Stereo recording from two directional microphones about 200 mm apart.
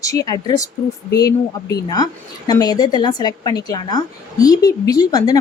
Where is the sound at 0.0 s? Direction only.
15° left (ahead or behind).